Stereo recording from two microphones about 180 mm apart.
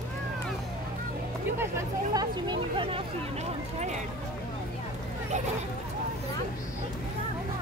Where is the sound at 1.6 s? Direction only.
20° right (ahead or behind).